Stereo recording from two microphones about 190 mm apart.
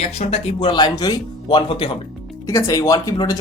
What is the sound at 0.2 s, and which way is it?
Speech, 30° left (ahead or behind).